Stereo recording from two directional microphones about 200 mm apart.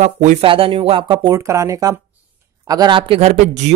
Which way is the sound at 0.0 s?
35° right (ahead or behind).